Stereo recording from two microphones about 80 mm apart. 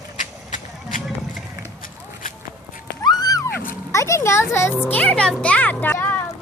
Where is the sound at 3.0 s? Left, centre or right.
Left.